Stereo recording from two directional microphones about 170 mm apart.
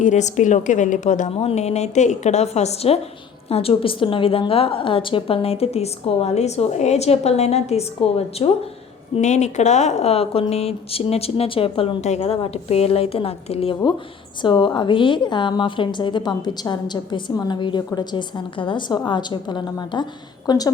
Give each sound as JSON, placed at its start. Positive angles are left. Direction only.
{"t": 0.0, "sound": "a woman's voice", "side_deg": 45}